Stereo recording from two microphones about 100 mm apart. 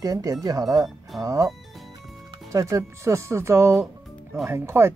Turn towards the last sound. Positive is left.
turn(degrees=-25)  # may be behind; listen again after turning